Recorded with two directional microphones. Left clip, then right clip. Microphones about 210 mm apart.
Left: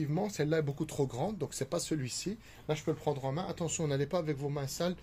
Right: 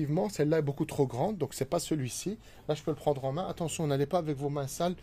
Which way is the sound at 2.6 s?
35° right (ahead or behind).